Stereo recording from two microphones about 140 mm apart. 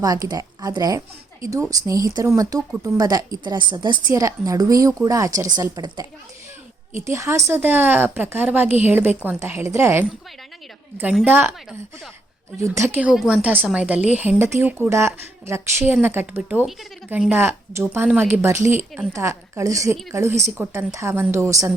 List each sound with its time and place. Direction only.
0.0 s speech: 25° right (ahead or behind)
4.1 s a woman's voice: 25° right (ahead or behind)
11.3 s a woman's voice: 15° right (ahead or behind)
12.5 s a woman's voice: 20° right (ahead or behind)